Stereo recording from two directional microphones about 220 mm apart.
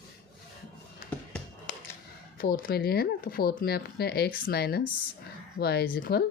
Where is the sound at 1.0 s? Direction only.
40° left (ahead or behind).